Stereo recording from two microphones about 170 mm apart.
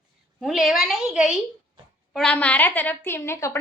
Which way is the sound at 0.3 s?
Centre (ahead or behind).